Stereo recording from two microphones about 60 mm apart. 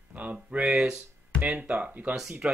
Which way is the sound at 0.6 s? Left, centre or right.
Centre.